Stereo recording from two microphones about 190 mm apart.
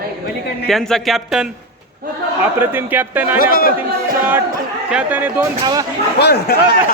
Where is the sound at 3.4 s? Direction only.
50° left (ahead or behind).